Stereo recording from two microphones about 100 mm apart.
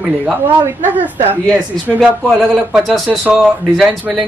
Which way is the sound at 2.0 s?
Centre (ahead or behind).